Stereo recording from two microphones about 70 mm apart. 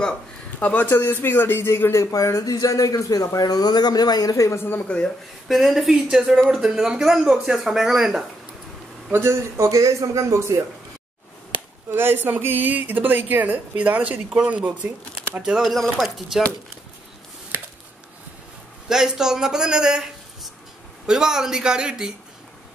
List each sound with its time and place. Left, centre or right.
0.6 s speech: centre
0.8 s speech: left
4.8 s speech: centre
5.5 s speech: centre
9.1 s a man's voice: right
11.9 s speech: right
15.6 s speech: centre
18.9 s a man's voice: centre
21.1 s a man's voice: centre